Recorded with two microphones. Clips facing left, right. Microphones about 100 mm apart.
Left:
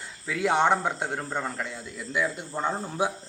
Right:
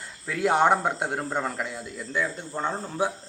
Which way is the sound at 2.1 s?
10° left (ahead or behind).